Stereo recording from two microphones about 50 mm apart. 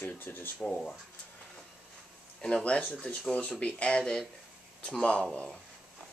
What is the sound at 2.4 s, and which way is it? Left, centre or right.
Speech, left.